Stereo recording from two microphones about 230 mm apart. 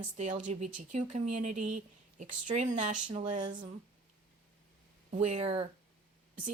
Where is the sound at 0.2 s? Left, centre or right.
Right.